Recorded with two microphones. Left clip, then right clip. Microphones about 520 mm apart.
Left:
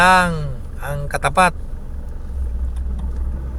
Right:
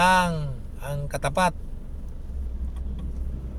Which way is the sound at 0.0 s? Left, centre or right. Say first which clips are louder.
Left 7 dB; right.